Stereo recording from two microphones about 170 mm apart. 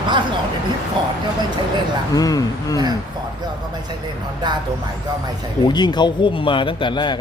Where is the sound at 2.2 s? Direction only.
20° left (ahead or behind).